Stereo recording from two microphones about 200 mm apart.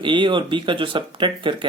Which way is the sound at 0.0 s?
25° right (ahead or behind).